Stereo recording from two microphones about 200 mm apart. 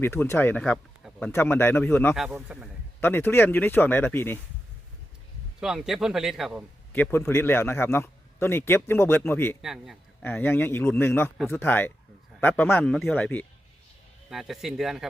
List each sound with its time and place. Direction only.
0.0 s a man's voice: 10° left (ahead or behind)
2.1 s a man's voice: 5° right (ahead or behind)
3.0 s a man's voice: 10° left (ahead or behind)
5.5 s a man's voice: 5° right (ahead or behind)
6.9 s a man's voice: 10° left (ahead or behind)
9.6 s a man's voice: centre (ahead or behind)
10.2 s a man's voice: 10° left (ahead or behind)